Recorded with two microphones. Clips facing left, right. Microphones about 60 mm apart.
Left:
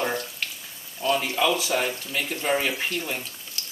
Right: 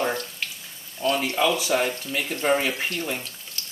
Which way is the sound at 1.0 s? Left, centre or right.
Centre.